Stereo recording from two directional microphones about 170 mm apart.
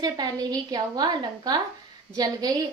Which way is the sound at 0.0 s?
20° right (ahead or behind).